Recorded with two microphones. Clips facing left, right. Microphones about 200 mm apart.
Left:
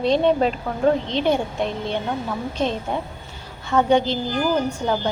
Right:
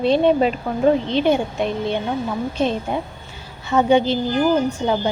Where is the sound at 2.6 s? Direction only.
5° right (ahead or behind).